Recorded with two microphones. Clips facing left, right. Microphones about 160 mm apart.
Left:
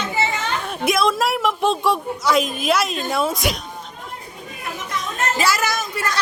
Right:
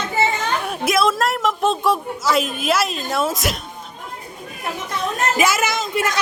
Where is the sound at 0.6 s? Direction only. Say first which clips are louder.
Even; centre (ahead or behind).